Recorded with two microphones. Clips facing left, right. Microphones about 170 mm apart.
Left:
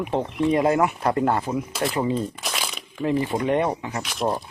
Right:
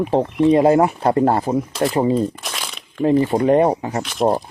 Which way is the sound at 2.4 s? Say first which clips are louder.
Even; centre (ahead or behind).